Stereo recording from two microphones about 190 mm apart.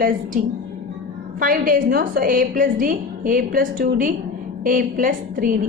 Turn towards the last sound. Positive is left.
turn(degrees=-45)  # may be behind; listen again after turning